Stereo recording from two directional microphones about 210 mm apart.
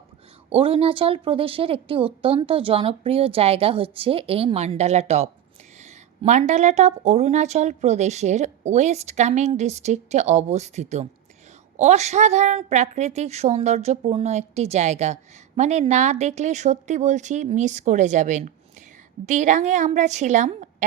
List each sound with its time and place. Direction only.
0.5 s a woman's voice: 25° right (ahead or behind)